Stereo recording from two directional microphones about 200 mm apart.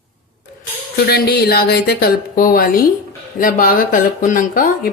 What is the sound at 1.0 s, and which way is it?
Speech, 50° left (ahead or behind).